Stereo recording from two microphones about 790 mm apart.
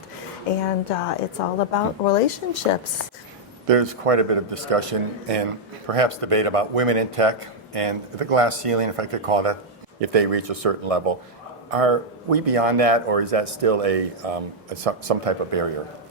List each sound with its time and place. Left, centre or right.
0.4 s a sound: left
1.4 s a woman's voice: left
3.7 s a man's voice: right